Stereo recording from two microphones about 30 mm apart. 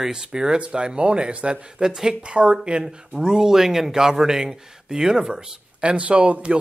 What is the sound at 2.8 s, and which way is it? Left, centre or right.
Speech, right.